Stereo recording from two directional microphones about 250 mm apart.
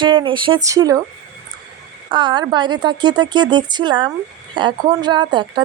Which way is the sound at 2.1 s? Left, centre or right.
Centre.